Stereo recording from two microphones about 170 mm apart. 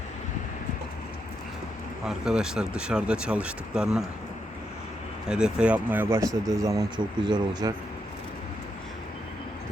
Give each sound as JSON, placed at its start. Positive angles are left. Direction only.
{"t": 2.0, "sound": "speech", "side_deg": -5}
{"t": 5.3, "sound": "speech", "side_deg": -5}